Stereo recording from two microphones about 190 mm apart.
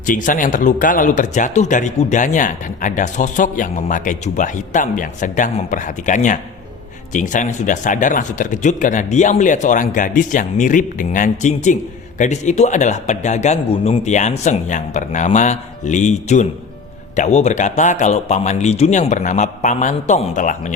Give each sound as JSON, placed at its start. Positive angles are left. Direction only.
{"t": 0.0, "sound": "speech", "side_deg": 45}